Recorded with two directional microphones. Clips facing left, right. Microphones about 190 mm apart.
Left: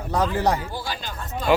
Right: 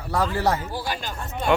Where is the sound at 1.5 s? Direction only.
5° left (ahead or behind).